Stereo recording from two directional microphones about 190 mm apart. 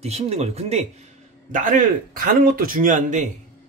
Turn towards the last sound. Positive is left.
turn(degrees=-40)  # may be behind; listen again after turning